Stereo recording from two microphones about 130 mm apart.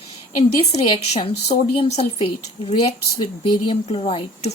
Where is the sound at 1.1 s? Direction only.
55° left (ahead or behind).